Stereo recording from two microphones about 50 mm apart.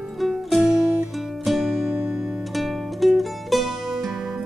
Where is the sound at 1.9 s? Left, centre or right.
Right.